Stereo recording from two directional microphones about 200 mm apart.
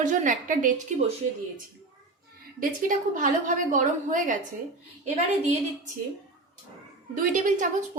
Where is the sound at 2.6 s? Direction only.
40° right (ahead or behind).